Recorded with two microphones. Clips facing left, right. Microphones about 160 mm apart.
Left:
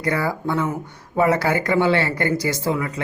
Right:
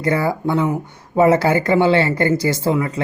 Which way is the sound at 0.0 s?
25° right (ahead or behind).